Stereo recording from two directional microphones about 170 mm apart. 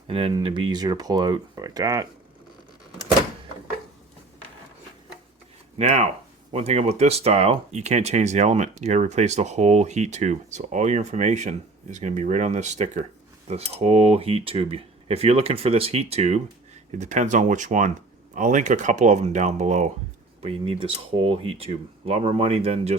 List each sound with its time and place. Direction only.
0.1 s speech: 35° right (ahead or behind)
5.7 s speech: 35° right (ahead or behind)
20.4 s speech: 30° right (ahead or behind)